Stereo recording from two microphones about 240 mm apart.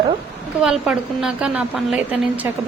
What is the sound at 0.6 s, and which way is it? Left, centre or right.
A woman's voice, centre.